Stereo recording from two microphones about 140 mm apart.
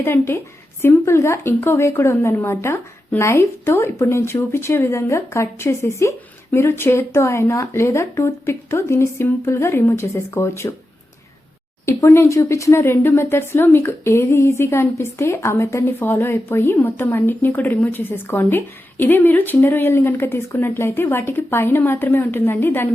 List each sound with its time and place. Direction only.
0.0 s a woman's voice: 15° left (ahead or behind)
11.9 s a woman's voice: 20° left (ahead or behind)